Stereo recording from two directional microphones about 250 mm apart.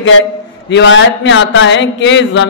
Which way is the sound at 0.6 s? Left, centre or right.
Left.